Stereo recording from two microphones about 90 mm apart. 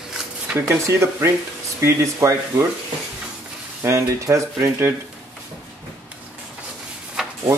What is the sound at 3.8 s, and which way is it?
Speech, 35° right (ahead or behind).